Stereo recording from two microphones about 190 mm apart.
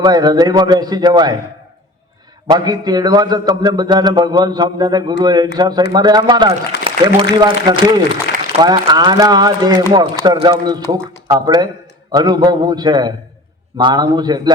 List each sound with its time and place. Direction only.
0.0 s a man's voice: 20° right (ahead or behind)
2.5 s a man's voice: 20° right (ahead or behind)